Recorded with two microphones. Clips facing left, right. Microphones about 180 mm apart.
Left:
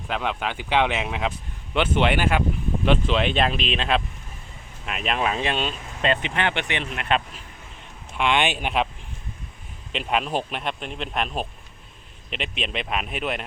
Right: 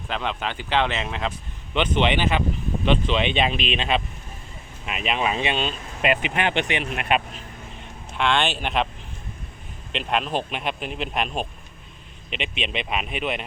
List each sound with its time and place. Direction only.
0.1 s speech: 5° left (ahead or behind)
6.0 s speech: 10° right (ahead or behind)
8.3 s speech: 15° left (ahead or behind)
10.1 s speech: 5° left (ahead or behind)